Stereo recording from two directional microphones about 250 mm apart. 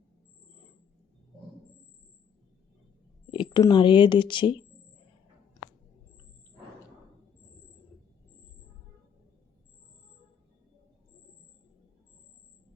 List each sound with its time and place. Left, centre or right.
3.3 s speech: centre